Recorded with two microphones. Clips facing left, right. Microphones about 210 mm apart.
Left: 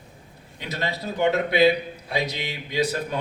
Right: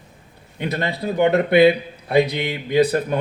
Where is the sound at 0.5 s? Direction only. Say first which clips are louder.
Right 6 dB; 55° right (ahead or behind).